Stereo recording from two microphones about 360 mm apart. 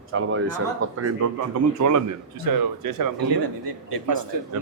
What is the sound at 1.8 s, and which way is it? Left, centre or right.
Speech, right.